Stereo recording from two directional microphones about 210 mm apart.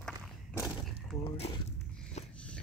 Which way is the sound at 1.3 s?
30° left (ahead or behind).